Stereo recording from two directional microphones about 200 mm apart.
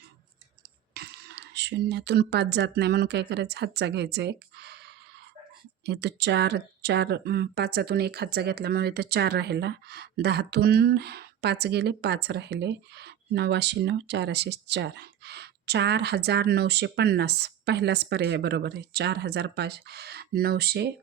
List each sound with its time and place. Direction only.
0.9 s speech: 55° right (ahead or behind)